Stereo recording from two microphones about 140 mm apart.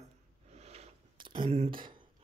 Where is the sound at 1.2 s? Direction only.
35° right (ahead or behind).